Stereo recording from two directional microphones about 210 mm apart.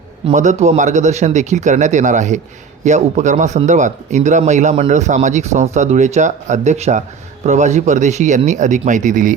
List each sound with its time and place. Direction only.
0.3 s a man's voice: 35° right (ahead or behind)